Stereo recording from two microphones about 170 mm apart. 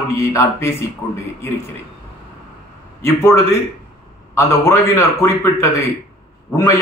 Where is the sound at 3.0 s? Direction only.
15° left (ahead or behind).